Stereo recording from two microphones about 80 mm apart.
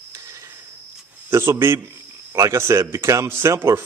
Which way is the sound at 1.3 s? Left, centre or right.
Right.